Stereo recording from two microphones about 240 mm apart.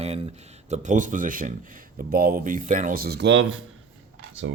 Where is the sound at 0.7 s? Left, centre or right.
Right.